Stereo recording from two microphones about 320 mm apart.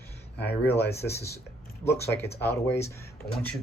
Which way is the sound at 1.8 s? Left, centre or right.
Centre.